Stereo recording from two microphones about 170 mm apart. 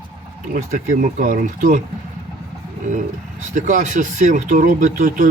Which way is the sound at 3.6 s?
50° right (ahead or behind).